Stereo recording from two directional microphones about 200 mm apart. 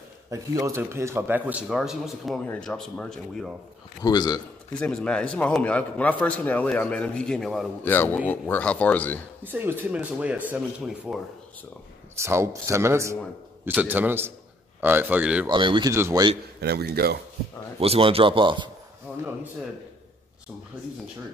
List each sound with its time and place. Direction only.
0.3 s speech: 15° right (ahead or behind); by 3.5 s centre (ahead or behind)
4.0 s a man's voice: 20° left (ahead or behind)
4.7 s a man's voice: 5° left (ahead or behind)
9.4 s speech: 10° right (ahead or behind)
12.2 s speech: 15° right (ahead or behind)
15.4 s a man's voice: 25° right (ahead or behind)
16.6 s speech: 50° right (ahead or behind)
17.7 s a man's voice: 30° right (ahead or behind)
19.1 s speech: 10° right (ahead or behind)